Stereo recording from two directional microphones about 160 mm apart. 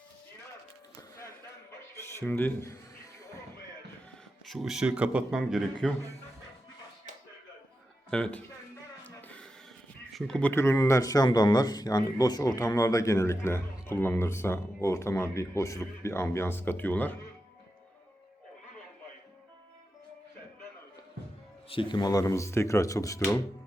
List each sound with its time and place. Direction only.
2.0 s speech: 15° left (ahead or behind)
4.4 s speech: centre (ahead or behind)
8.1 s speech: 5° left (ahead or behind)
9.0 s a sound: 10° left (ahead or behind)
10.1 s speech: centre (ahead or behind)
10.5 s speech: 15° left (ahead or behind)
21.7 s speech: 30° left (ahead or behind)